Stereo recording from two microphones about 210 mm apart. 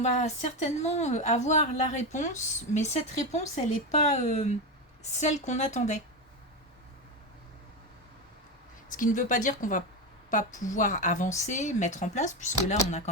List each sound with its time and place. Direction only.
0.0 s a woman's voice: 35° left (ahead or behind)
8.9 s a woman's voice: 40° left (ahead or behind)